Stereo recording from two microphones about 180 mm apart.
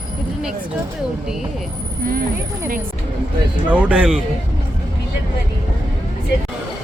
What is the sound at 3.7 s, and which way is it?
Speech, 5° right (ahead or behind).